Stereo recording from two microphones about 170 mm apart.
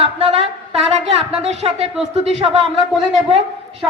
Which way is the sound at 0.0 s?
35° right (ahead or behind).